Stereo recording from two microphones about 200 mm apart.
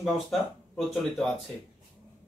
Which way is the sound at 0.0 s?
Centre (ahead or behind).